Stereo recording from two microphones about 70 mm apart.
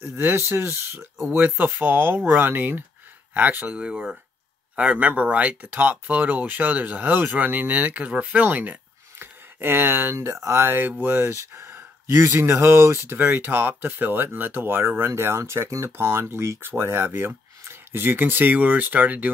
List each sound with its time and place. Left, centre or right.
0.0 s speech: right
9.2 s a sound: right
10.1 s speech: right